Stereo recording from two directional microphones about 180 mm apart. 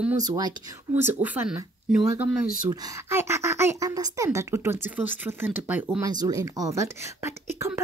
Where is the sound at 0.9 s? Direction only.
10° right (ahead or behind).